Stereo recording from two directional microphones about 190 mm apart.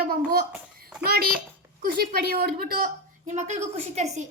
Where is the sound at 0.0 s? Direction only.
50° right (ahead or behind).